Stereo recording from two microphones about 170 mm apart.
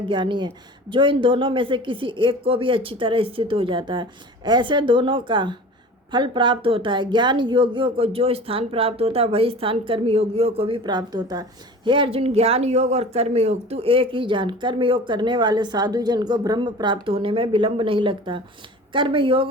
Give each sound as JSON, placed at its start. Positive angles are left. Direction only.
{"t": 0.0, "sound": "speech", "side_deg": -30}